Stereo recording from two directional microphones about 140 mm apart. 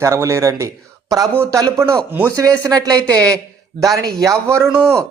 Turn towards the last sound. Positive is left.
turn(degrees=-20)  # may be behind; listen again after turning